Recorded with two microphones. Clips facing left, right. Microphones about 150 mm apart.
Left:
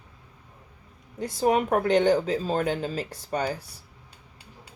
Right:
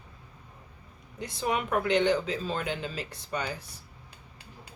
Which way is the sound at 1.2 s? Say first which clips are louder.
Left 7 dB; 40° left (ahead or behind).